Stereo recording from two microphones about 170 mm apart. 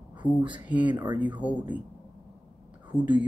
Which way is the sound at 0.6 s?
10° right (ahead or behind).